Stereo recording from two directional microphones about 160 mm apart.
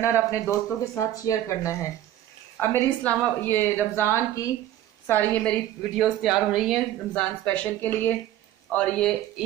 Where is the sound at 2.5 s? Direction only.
10° left (ahead or behind).